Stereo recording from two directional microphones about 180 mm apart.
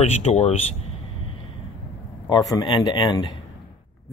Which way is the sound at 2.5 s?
25° left (ahead or behind).